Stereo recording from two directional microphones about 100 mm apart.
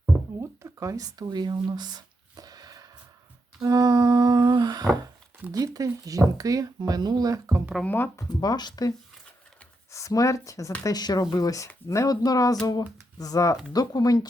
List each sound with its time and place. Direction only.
0.3 s a sound: 35° right (ahead or behind)
3.6 s speech: 40° right (ahead or behind)
7.9 s speech: 20° left (ahead or behind)
8.3 s speech: 40° left (ahead or behind)
9.9 s speech: 35° left (ahead or behind)